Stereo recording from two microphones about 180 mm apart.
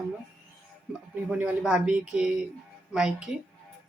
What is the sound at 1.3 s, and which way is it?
Speech, 5° right (ahead or behind).